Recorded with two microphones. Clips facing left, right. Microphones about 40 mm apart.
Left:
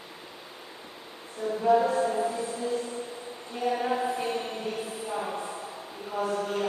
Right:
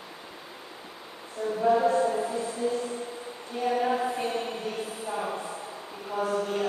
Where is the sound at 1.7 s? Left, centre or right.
Centre.